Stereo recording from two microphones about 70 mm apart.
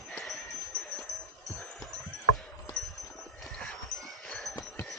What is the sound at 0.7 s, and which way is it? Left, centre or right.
Dog, left.